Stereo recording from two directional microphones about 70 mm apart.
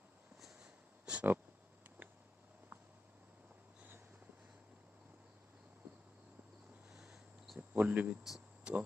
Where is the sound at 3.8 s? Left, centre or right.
Right.